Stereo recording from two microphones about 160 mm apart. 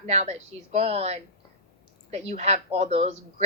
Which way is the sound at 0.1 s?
45° right (ahead or behind).